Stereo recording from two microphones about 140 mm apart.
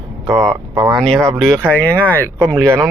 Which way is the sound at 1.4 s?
5° left (ahead or behind).